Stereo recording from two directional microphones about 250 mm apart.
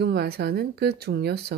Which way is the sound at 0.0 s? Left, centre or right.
Right.